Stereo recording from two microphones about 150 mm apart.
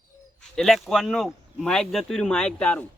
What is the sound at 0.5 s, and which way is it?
Speech, 5° left (ahead or behind).